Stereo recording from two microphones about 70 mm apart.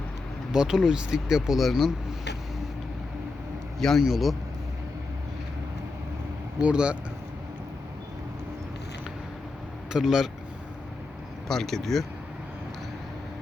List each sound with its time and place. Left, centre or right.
0.5 s speech: centre
3.8 s a man's voice: centre
6.6 s speech: centre
9.9 s speech: centre
11.4 s speech: centre